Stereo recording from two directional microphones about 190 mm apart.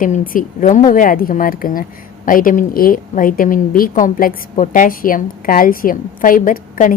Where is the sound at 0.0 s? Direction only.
45° left (ahead or behind).